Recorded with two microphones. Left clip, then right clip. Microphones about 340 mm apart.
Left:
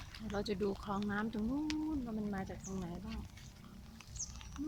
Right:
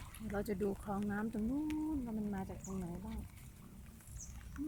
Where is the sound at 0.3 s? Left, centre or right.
Centre.